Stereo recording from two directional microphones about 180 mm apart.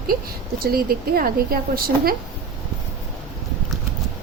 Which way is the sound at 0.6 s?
55° right (ahead or behind).